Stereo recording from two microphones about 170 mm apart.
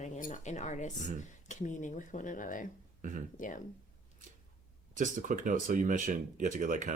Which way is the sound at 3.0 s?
50° right (ahead or behind).